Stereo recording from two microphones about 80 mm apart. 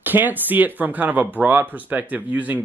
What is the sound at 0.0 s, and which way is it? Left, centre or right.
Speech, right.